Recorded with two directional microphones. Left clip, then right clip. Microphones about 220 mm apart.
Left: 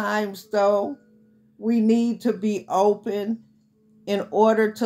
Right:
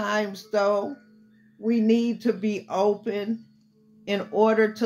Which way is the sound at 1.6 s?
45° left (ahead or behind).